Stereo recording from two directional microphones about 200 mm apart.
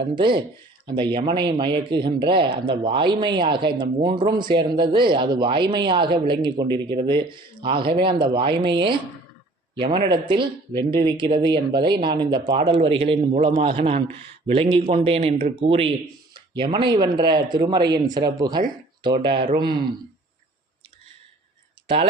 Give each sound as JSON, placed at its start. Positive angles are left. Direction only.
{"t": 0.0, "sound": "speech", "side_deg": -25}